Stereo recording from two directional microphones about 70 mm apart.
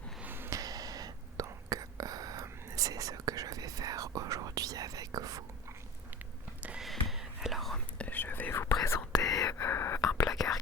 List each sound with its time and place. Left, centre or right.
0.2 s a sound: right
0.5 s whispering: right
6.7 s whispering: centre
7.9 s whispering: left
8.7 s whispering: left
9.1 s whispering: left
9.6 s whispering: left
10.2 s whispering: left